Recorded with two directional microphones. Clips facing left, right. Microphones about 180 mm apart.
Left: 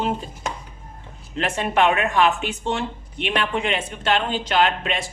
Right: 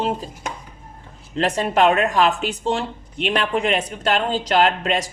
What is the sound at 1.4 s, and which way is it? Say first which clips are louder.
Speech: right 3 dB; 35° right (ahead or behind).